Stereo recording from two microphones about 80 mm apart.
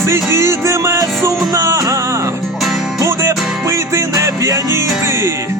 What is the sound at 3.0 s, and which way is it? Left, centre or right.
Music, right.